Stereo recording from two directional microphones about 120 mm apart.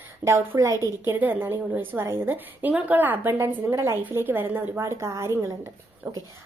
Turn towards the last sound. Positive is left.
turn(degrees=-25)  # may be behind; listen again after turning